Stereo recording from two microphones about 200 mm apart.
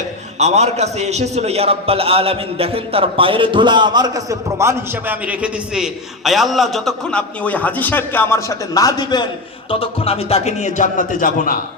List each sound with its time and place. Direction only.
0.3 s a man's voice: 35° right (ahead or behind); by 11.6 s 45° left (ahead or behind)